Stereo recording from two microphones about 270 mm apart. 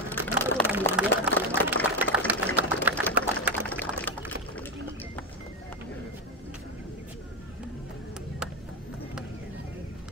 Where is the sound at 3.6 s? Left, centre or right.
Centre.